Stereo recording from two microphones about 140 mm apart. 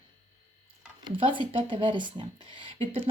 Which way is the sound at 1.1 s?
35° right (ahead or behind).